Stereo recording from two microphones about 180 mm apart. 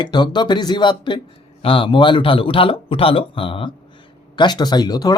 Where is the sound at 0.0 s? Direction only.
25° left (ahead or behind).